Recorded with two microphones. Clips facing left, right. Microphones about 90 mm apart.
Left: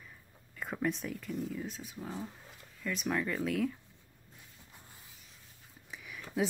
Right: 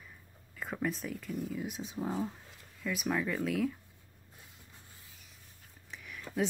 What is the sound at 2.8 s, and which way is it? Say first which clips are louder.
Speech: right 1 dB; 5° right (ahead or behind).